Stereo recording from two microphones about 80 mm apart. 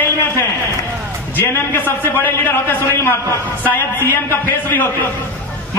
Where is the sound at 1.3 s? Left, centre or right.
Left.